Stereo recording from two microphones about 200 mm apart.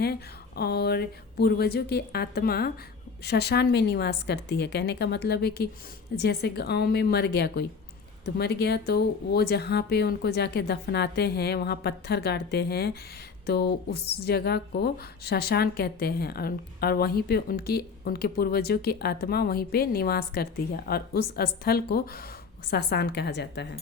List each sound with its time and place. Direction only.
0.0 s speech: 50° left (ahead or behind)